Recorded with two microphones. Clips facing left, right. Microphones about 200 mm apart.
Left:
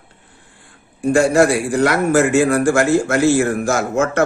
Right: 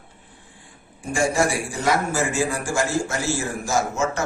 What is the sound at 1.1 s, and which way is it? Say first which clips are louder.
A man's voice: left 8 dB; 65° left (ahead or behind).